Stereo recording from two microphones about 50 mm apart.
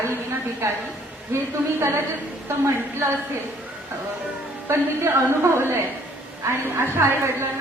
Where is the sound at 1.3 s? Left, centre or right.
Right.